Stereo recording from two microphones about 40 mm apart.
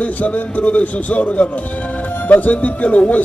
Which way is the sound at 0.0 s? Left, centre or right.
Left.